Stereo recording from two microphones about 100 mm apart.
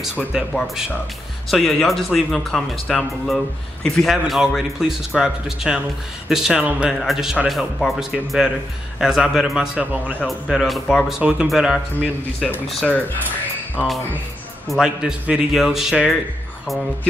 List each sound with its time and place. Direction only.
0.5 s speech: 15° left (ahead or behind)
1.5 s speech: centre (ahead or behind)
13.8 s speech: 5° right (ahead or behind)